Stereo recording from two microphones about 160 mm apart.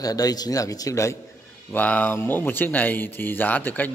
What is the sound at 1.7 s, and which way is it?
A man's voice, 10° left (ahead or behind).